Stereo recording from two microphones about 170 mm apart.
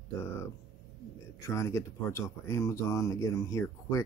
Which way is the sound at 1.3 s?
15° left (ahead or behind).